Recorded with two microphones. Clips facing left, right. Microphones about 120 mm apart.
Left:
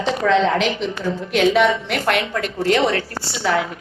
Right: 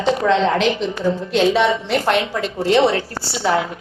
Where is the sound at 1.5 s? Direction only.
25° right (ahead or behind).